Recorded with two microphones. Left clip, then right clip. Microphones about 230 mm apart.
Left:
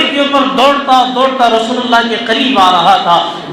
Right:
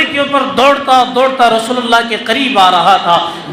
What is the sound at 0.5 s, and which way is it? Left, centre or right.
A man's voice, right.